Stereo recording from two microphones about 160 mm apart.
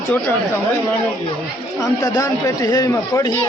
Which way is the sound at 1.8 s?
20° left (ahead or behind).